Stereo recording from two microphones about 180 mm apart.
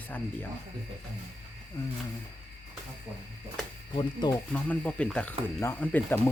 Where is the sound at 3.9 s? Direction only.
25° left (ahead or behind).